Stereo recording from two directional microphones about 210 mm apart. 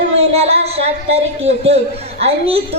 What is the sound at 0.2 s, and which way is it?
A man's voice, 30° right (ahead or behind).